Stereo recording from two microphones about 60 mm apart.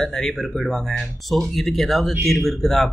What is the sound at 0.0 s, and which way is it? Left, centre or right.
Speech, centre.